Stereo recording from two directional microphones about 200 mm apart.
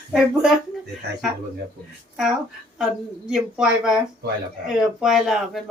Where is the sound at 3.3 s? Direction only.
5° right (ahead or behind).